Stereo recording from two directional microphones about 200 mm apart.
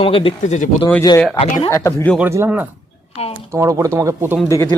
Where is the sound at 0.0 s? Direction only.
30° left (ahead or behind).